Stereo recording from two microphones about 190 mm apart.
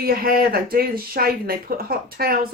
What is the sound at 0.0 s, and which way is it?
Speech, 50° right (ahead or behind).